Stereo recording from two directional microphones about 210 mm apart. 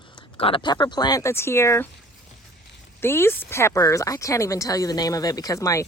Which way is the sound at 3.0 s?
10° left (ahead or behind).